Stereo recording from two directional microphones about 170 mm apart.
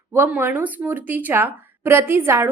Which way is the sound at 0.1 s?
10° right (ahead or behind).